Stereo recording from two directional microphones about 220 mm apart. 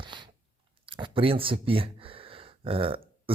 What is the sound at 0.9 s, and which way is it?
Speech, 25° right (ahead or behind).